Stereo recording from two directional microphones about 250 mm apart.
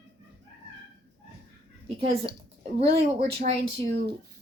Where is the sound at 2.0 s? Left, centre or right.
Right.